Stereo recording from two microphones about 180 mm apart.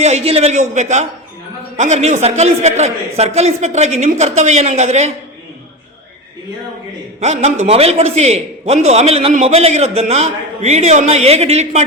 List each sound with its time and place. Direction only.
0.0 s a man's voice: 35° right (ahead or behind)
7.2 s a man's voice: 35° right (ahead or behind)